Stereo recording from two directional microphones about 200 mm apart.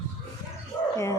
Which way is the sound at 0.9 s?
15° left (ahead or behind).